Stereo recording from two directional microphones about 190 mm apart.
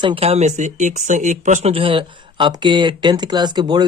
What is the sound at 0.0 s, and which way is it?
Speech, 30° right (ahead or behind).